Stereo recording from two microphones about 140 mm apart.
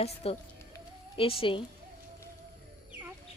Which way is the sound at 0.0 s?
45° left (ahead or behind).